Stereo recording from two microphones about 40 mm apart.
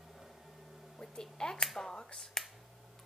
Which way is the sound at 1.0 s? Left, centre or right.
Centre.